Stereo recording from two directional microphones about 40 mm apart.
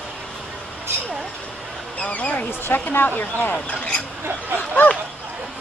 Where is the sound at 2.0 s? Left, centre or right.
Left.